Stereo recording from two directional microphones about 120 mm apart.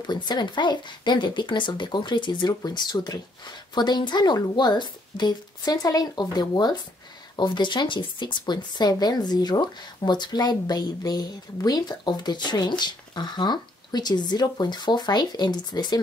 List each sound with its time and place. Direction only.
0.0 s speech: 35° left (ahead or behind)